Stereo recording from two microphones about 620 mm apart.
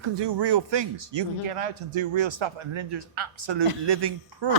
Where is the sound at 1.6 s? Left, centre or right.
Right.